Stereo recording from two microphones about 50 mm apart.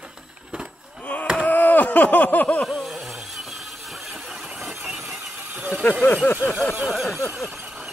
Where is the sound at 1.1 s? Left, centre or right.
Left.